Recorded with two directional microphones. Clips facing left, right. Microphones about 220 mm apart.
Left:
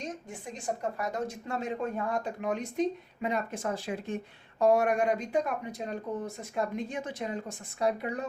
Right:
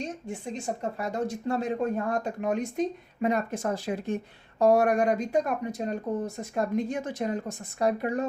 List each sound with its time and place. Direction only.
0.3 s speech: 25° right (ahead or behind); by 8.2 s 45° right (ahead or behind)